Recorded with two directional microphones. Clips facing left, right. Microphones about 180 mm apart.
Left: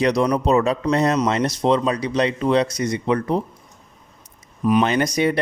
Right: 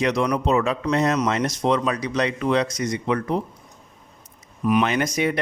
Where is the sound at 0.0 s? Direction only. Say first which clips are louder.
Left 3 dB; 35° left (ahead or behind).